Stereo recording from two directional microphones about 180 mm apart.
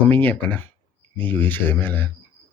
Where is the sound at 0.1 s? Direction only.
10° left (ahead or behind).